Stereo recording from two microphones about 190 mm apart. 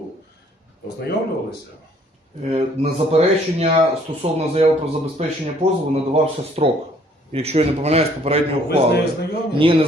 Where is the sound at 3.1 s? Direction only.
35° right (ahead or behind).